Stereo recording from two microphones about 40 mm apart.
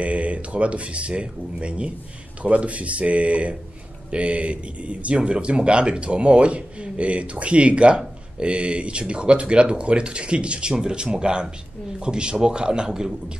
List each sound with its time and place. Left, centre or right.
0.0 s speech: right; by 13.1 s centre